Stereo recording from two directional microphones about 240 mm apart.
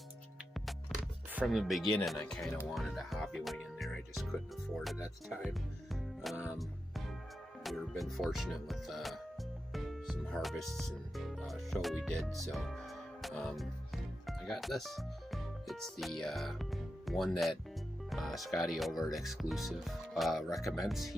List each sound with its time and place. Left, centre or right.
0.5 s music: centre
2.6 s speech: centre
13.2 s music: centre
18.1 s speech: centre